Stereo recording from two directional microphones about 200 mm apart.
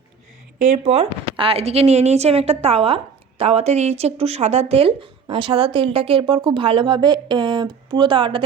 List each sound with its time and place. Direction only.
0.6 s speech: 35° right (ahead or behind)